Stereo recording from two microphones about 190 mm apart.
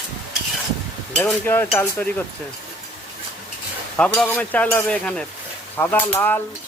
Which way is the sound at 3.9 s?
5° left (ahead or behind).